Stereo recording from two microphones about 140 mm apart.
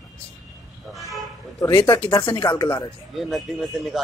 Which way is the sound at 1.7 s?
35° left (ahead or behind).